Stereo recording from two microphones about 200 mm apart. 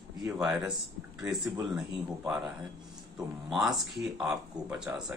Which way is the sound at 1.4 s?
15° right (ahead or behind).